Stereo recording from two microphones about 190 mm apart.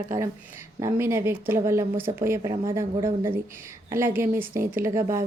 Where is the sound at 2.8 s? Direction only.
15° right (ahead or behind).